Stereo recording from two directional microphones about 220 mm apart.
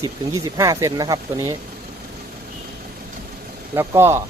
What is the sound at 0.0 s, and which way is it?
Speech, 15° right (ahead or behind).